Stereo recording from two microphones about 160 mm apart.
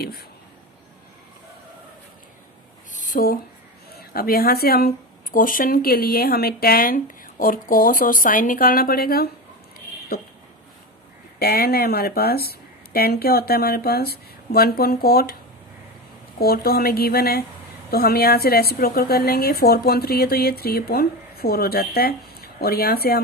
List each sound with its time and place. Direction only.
0.0 s a woman's voice: 75° left (ahead or behind)
2.9 s a sound: 55° left (ahead or behind)
3.9 s speech: 70° left (ahead or behind)
5.3 s speech: 60° left (ahead or behind)
11.3 s a woman's voice: 75° left (ahead or behind)
16.4 s a woman's voice: 70° left (ahead or behind)